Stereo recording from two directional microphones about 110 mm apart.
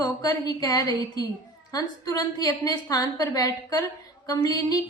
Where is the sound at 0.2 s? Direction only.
35° left (ahead or behind).